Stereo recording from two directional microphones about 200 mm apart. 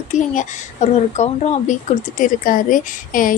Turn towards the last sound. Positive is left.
turn(degrees=45)  # may be behind; listen again after turning